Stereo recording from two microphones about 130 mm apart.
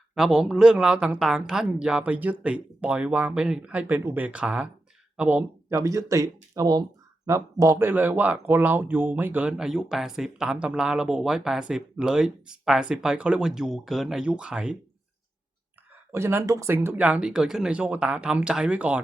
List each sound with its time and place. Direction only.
0.1 s speech: 5° right (ahead or behind)
5.7 s speech: 25° right (ahead or behind); by 14.8 s 5° right (ahead or behind)
16.1 s speech: 20° right (ahead or behind)